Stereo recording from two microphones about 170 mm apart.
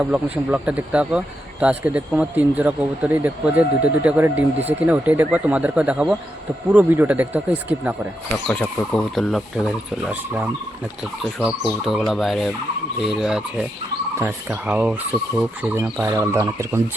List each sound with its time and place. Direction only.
0.0 s speech: 5° right (ahead or behind)
8.9 s speech: 5° left (ahead or behind); by 16.8 s 15° right (ahead or behind)